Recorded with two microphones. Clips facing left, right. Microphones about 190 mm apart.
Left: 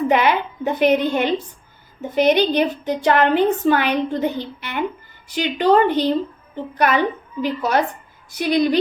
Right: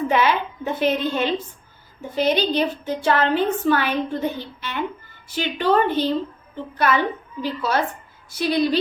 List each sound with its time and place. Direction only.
0.1 s a woman's voice: 15° left (ahead or behind)